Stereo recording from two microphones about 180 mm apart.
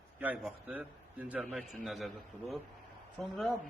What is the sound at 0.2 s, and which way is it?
A man's voice, 10° right (ahead or behind).